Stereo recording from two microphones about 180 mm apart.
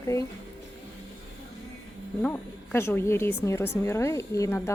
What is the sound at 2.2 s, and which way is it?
Speech, 10° left (ahead or behind).